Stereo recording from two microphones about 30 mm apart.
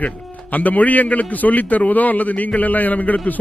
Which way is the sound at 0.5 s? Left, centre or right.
Left.